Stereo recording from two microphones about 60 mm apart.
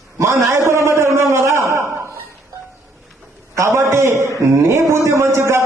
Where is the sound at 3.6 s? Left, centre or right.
Right.